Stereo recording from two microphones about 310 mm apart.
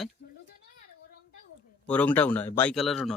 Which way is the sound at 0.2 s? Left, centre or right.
Left.